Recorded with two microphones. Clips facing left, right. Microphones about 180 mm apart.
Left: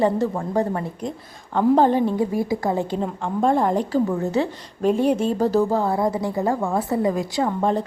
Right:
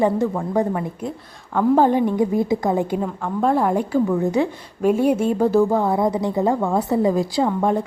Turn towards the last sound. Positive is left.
turn(degrees=-5)  # may be behind; listen again after turning